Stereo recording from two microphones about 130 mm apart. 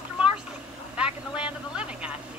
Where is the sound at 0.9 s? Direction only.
10° right (ahead or behind).